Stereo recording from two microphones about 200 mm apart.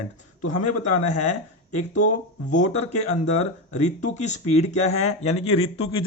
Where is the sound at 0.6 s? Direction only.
35° left (ahead or behind).